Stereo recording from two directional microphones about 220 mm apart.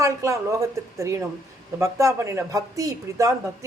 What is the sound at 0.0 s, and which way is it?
Speech, 15° right (ahead or behind).